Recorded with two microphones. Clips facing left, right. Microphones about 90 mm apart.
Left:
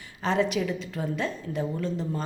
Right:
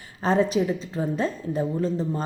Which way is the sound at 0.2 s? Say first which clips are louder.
Right 4 dB; 35° right (ahead or behind).